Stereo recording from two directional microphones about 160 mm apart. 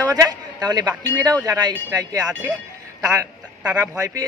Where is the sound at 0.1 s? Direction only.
25° right (ahead or behind).